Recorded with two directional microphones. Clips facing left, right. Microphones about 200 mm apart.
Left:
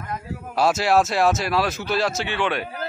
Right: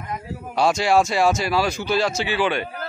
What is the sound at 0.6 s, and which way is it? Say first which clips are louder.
Speech: right 1 dB; 5° left (ahead or behind).